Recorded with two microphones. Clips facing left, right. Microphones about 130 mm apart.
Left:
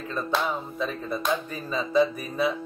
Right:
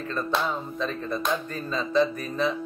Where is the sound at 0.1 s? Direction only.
10° left (ahead or behind).